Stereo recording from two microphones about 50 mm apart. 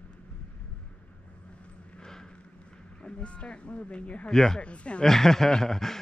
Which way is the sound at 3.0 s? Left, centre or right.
Left.